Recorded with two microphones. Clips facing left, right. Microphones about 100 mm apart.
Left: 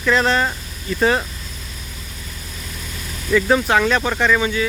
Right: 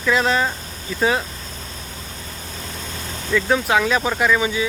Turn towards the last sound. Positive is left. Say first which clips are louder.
# left 1 dB
turn(degrees=-15)  # may be behind; listen again after turning